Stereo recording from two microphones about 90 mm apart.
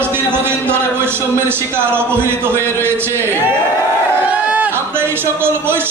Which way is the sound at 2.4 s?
25° right (ahead or behind).